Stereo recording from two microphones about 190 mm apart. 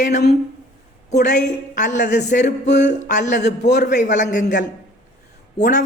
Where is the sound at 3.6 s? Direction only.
60° left (ahead or behind).